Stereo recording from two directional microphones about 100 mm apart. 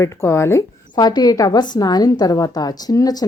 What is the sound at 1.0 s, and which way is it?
A woman's voice, 40° left (ahead or behind).